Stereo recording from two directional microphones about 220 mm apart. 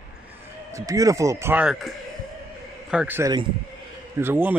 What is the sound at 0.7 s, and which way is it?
A man's voice, 15° right (ahead or behind).